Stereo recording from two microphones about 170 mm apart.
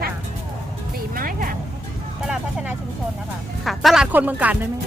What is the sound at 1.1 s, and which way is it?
Vehicle, 55° right (ahead or behind).